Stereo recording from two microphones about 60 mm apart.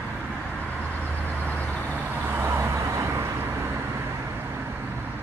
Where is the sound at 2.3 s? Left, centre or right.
Right.